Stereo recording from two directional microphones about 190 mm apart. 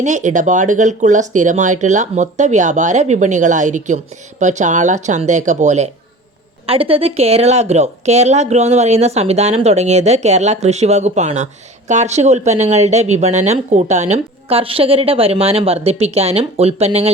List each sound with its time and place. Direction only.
0.0 s speech: 40° right (ahead or behind)